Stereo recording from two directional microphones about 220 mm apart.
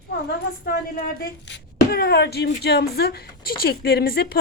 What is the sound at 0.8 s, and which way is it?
Speech, 45° left (ahead or behind).